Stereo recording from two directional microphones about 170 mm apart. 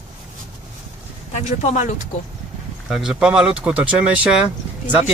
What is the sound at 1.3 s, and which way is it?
Speech, 45° left (ahead or behind).